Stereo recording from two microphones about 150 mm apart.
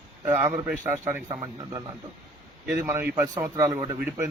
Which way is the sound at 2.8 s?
15° right (ahead or behind).